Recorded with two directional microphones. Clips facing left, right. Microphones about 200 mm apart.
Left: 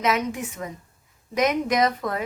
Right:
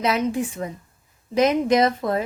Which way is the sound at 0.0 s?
30° right (ahead or behind).